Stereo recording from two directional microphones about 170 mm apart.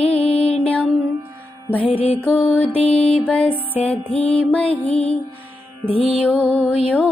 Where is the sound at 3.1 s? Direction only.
5° left (ahead or behind).